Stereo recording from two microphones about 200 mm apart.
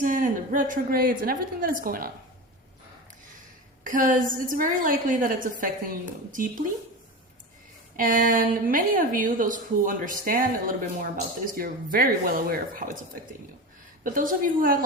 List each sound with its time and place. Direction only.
0.0 s a woman's voice: 40° right (ahead or behind)
3.8 s a woman's voice: 40° right (ahead or behind)
7.9 s a woman's voice: 40° right (ahead or behind)
14.0 s a woman's voice: 40° right (ahead or behind)